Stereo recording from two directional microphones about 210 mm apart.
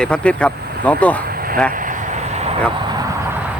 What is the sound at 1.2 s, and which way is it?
Vehicle, 45° right (ahead or behind).